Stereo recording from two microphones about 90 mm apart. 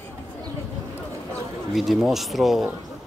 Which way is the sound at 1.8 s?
Centre (ahead or behind).